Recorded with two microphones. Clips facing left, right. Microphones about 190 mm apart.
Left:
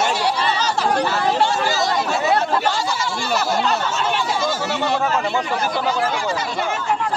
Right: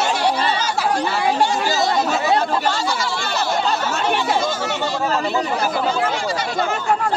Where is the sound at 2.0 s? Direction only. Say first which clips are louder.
Right 1 dB; 30° right (ahead or behind).